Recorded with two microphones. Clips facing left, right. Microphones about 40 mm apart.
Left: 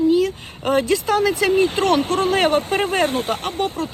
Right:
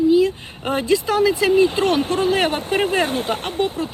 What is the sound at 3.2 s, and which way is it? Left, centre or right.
Speech, right.